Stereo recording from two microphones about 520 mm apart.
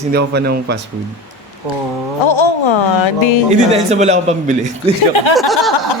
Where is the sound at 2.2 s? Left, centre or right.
Left.